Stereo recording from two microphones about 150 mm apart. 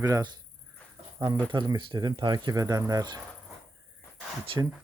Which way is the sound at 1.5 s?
30° right (ahead or behind).